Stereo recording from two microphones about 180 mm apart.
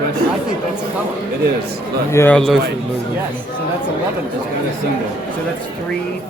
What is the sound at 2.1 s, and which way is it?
Speech, 10° left (ahead or behind).